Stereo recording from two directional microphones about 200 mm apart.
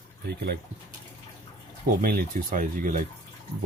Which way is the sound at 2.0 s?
45° right (ahead or behind).